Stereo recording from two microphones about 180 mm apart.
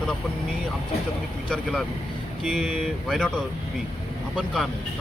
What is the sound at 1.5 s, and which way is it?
Speech, centre (ahead or behind).